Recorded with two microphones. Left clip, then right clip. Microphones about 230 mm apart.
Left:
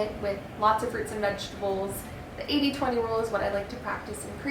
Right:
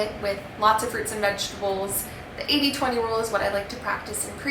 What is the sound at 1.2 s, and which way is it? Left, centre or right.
A woman's voice, centre.